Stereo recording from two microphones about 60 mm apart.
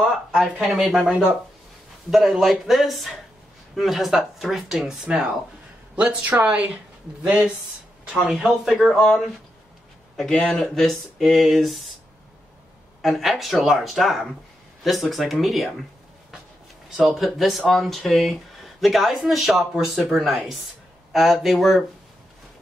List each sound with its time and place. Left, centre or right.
0.4 s speech: centre
8.2 s speech: centre
13.0 s speech: centre
17.2 s speech: centre